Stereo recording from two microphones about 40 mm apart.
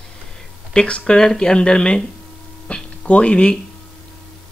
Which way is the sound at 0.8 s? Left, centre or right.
Left.